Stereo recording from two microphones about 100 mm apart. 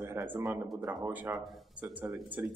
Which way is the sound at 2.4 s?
20° right (ahead or behind).